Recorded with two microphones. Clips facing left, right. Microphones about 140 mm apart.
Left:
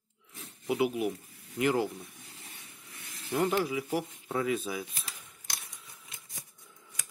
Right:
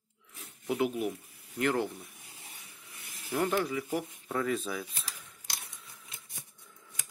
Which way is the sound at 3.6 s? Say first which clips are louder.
Left 1 dB; 5° left (ahead or behind).